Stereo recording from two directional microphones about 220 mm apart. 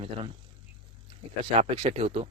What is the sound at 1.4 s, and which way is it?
Speech, 25° right (ahead or behind).